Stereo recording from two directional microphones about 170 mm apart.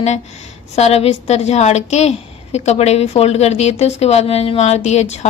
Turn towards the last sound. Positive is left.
turn(degrees=40)  # may be behind; listen again after turning